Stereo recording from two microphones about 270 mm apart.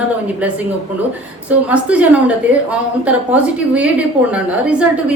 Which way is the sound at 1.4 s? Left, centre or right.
Centre.